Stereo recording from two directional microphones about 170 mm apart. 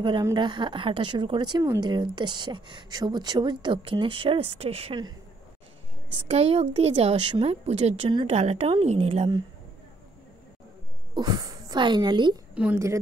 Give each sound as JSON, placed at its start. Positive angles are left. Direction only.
{"t": 0.0, "sound": "speech", "side_deg": -25}
{"t": 6.1, "sound": "a woman's voice", "side_deg": -40}
{"t": 11.1, "sound": "speech", "side_deg": -20}
{"t": 12.5, "sound": "a woman's voice", "side_deg": -10}